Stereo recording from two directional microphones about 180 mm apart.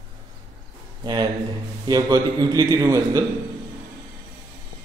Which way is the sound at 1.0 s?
25° right (ahead or behind).